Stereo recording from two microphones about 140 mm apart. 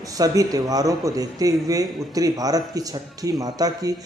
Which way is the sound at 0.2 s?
25° right (ahead or behind).